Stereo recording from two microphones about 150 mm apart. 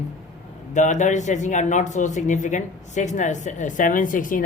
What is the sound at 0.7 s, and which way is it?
A man's voice, 55° left (ahead or behind).